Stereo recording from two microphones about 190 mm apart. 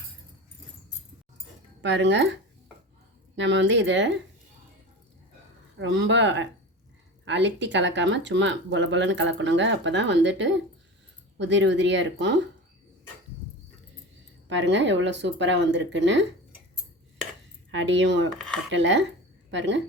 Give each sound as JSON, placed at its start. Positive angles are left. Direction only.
{"t": 1.8, "sound": "speech", "side_deg": -70}
{"t": 5.8, "sound": "speech", "side_deg": -70}
{"t": 14.5, "sound": "speech", "side_deg": -70}
{"t": 17.7, "sound": "speech", "side_deg": -75}